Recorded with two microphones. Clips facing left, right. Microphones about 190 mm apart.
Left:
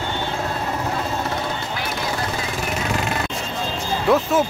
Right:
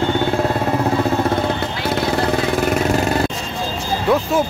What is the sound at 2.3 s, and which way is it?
Jackhammer, 60° right (ahead or behind).